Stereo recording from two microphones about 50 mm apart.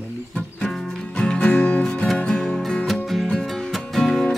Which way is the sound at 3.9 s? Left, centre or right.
Centre.